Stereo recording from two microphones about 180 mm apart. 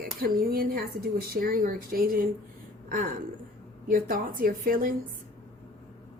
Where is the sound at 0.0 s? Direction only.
55° right (ahead or behind).